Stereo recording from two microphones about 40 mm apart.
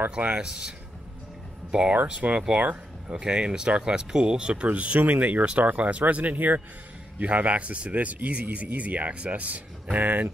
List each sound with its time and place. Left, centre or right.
0.4 s speech: centre
2.0 s speech: right
5.4 s speech: right